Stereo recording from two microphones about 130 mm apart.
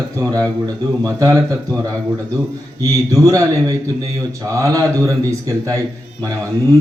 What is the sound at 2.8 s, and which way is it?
Speech, 25° right (ahead or behind).